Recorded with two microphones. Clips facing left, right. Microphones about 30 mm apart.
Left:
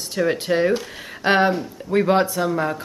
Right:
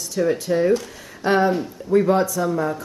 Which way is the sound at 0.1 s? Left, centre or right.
Left.